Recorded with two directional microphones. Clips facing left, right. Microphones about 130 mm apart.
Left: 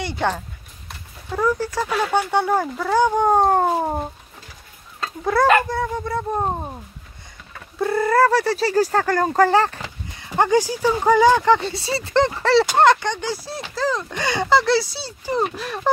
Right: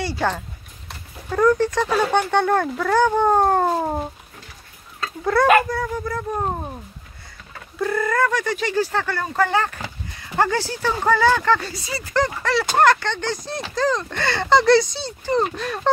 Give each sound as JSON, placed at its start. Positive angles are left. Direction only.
{"t": 0.0, "sound": "speech", "side_deg": 20}
{"t": 0.8, "sound": "speech", "side_deg": 5}
{"t": 5.0, "sound": "speech", "side_deg": 25}
{"t": 7.8, "sound": "speech", "side_deg": 30}
{"t": 10.1, "sound": "speech", "side_deg": 20}